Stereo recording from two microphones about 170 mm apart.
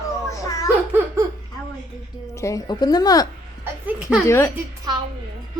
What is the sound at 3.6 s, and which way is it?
Speech, 10° right (ahead or behind).